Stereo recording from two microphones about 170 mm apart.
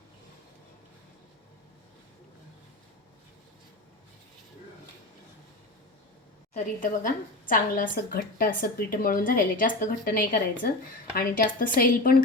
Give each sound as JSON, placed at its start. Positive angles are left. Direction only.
{"t": 6.5, "sound": "a woman's voice", "side_deg": 45}